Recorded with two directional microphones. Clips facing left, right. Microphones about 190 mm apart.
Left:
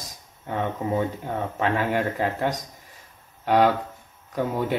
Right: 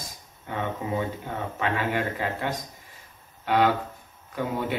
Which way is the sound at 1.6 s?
45° left (ahead or behind).